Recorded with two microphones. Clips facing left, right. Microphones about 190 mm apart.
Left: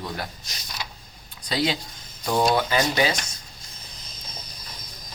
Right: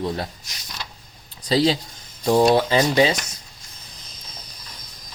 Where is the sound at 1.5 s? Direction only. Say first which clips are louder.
Right 6 dB; 30° right (ahead or behind).